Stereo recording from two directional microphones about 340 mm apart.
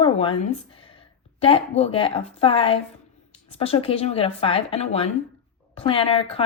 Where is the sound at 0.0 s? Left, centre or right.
Centre.